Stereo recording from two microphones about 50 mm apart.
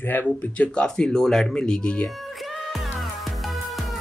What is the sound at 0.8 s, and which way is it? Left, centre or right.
Speech, centre.